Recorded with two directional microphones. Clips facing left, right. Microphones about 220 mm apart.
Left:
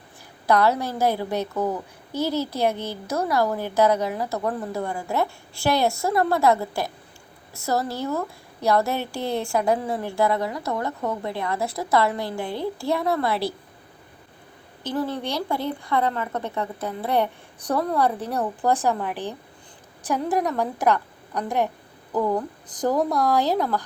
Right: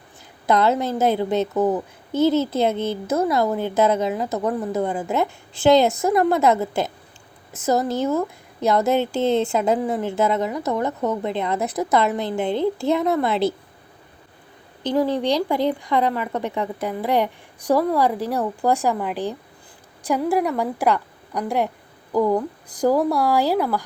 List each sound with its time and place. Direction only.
0.4 s a woman's voice: 20° right (ahead or behind)
14.8 s a woman's voice: 15° right (ahead or behind)